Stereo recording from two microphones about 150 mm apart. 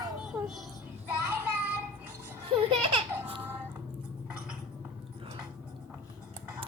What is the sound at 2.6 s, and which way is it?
Baby laughter, 35° right (ahead or behind).